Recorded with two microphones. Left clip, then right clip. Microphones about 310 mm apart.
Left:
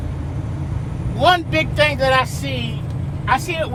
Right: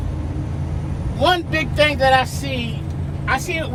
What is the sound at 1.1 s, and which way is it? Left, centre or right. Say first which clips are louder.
Speech: left 2 dB; left.